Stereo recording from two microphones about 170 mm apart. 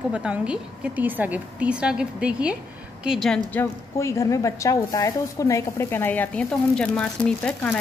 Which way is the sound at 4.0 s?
15° left (ahead or behind).